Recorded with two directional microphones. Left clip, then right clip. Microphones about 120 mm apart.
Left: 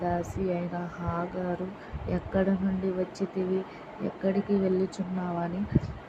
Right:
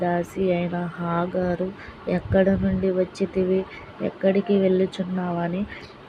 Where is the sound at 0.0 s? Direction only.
30° right (ahead or behind).